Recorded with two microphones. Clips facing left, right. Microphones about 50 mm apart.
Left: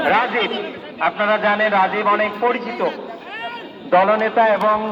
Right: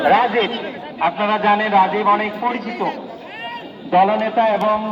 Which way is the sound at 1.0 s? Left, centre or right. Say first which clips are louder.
Even; left.